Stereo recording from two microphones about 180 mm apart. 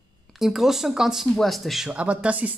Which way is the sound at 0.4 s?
Centre (ahead or behind).